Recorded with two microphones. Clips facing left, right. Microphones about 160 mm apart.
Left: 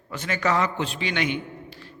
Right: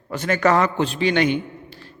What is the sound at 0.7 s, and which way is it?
A man's voice, 35° right (ahead or behind).